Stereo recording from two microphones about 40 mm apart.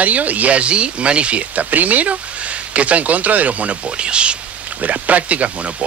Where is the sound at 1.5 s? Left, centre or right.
Right.